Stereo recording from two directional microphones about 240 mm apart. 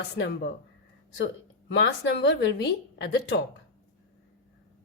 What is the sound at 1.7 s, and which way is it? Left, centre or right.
A woman's voice, left.